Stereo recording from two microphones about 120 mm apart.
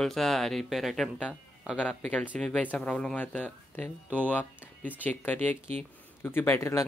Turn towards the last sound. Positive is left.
turn(degrees=20)  # may be behind; listen again after turning